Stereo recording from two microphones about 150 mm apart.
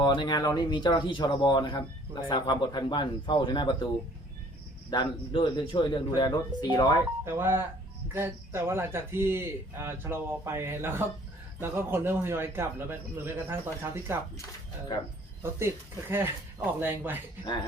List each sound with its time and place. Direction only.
0.0 s speech: 30° left (ahead or behind)
4.9 s speech: 30° left (ahead or behind)
7.3 s a man's voice: 15° right (ahead or behind)
15.4 s a man's voice: 15° right (ahead or behind)